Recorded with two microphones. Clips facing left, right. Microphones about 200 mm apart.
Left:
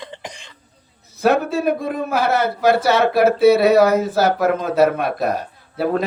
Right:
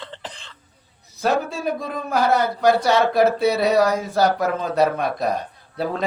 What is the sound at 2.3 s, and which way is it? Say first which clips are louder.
Speech: left 3 dB; 5° left (ahead or behind).